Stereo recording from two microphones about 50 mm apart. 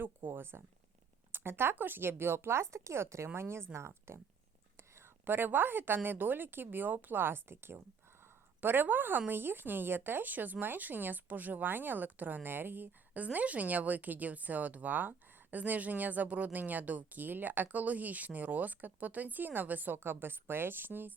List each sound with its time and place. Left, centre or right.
0.0 s speech: right
5.2 s speech: right
8.6 s speech: right
13.2 s speech: right